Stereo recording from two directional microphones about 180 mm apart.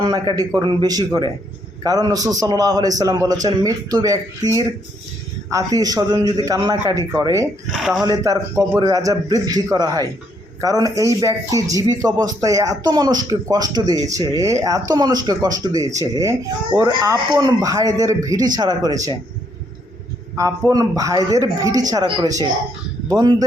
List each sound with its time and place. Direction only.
0.0 s speech: 25° right (ahead or behind)
7.7 s speech: centre (ahead or behind)
8.0 s speech: 20° right (ahead or behind)
20.3 s a man's voice: 15° right (ahead or behind)